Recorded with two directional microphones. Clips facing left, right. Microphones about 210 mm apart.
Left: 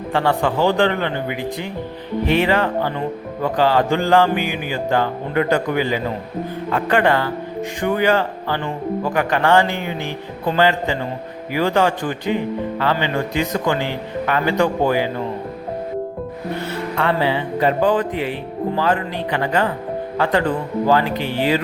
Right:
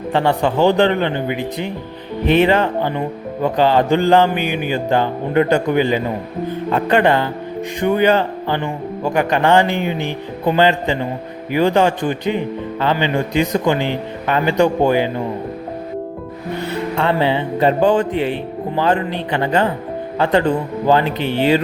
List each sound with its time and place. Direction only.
0.1 s speech: 20° right (ahead or behind)
16.6 s speech: 25° right (ahead or behind)
20.8 s speech: 25° right (ahead or behind)